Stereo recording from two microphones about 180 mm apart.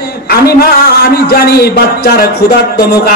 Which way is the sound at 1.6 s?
60° left (ahead or behind).